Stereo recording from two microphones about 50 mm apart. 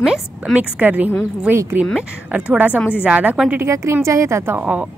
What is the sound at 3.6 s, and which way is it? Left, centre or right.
Speech, right.